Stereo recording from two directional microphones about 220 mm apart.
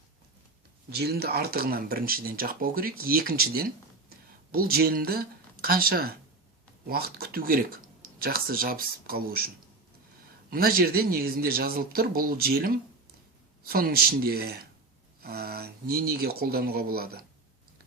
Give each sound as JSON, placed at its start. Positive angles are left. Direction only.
{"t": 0.9, "sound": "speech", "side_deg": -45}
{"t": 10.5, "sound": "speech", "side_deg": -45}